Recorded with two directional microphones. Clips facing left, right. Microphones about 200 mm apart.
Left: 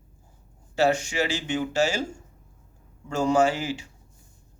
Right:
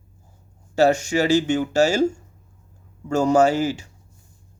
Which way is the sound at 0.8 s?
40° right (ahead or behind).